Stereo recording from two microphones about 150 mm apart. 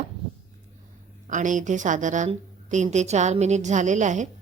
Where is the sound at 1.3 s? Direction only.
55° right (ahead or behind).